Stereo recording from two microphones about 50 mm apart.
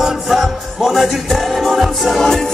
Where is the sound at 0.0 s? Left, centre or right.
Centre.